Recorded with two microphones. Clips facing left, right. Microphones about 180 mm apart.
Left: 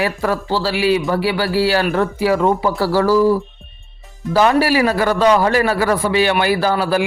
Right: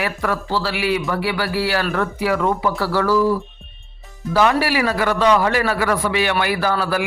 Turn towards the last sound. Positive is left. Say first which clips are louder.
# left 4 dB
turn(degrees=30)  # may be behind; listen again after turning